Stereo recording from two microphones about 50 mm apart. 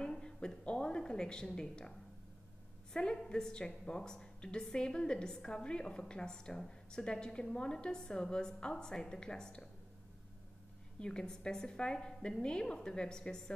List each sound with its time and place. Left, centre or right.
0.0 s a woman's voice: centre
11.0 s a woman's voice: centre